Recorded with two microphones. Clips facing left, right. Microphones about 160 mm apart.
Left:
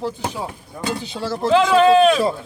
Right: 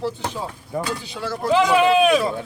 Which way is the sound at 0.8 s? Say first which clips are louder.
Left 7 dB; 25° left (ahead or behind).